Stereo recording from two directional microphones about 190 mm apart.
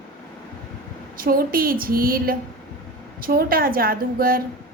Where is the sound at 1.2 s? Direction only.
50° right (ahead or behind).